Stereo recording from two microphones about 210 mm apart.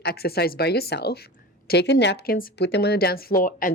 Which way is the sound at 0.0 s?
50° left (ahead or behind).